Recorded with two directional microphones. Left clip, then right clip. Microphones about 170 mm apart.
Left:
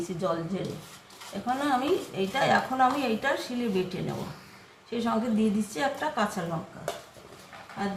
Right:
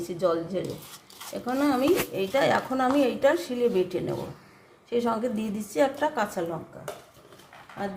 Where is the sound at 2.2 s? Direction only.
65° right (ahead or behind).